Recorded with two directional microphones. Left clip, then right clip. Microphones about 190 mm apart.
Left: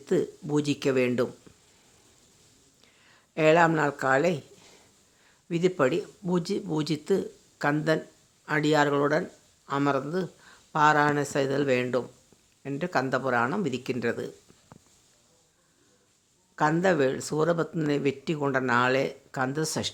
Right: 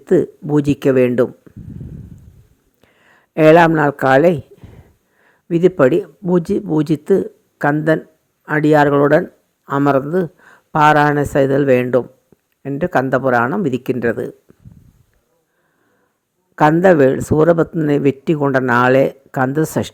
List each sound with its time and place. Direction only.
0.0 s speech: 30° right (ahead or behind)
2.8 s speech: 30° right (ahead or behind)
16.8 s speech: 30° right (ahead or behind)
18.3 s speech: 20° right (ahead or behind)